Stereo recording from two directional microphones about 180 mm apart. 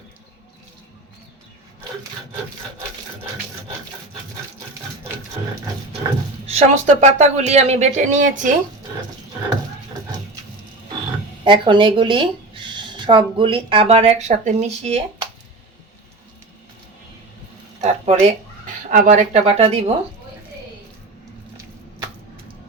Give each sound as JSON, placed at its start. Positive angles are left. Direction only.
{"t": 6.5, "sound": "speech", "side_deg": -40}
{"t": 11.4, "sound": "speech", "side_deg": -25}
{"t": 18.0, "sound": "speech", "side_deg": -45}